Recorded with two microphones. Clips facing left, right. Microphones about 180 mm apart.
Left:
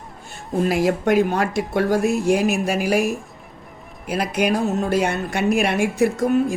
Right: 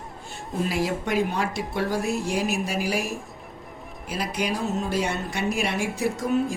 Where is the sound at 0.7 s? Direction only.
55° left (ahead or behind).